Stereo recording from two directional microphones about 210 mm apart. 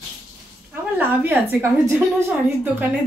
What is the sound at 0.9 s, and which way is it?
A woman's voice, 10° right (ahead or behind).